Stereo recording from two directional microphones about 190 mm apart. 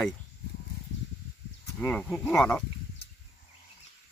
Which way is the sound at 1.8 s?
5° left (ahead or behind).